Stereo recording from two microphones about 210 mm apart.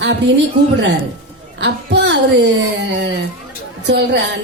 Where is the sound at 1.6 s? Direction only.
55° right (ahead or behind).